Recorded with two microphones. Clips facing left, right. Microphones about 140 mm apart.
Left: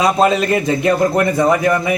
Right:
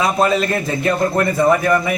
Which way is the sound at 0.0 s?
20° left (ahead or behind).